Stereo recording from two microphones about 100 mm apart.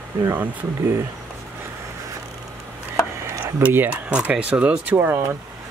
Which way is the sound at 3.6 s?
15° right (ahead or behind).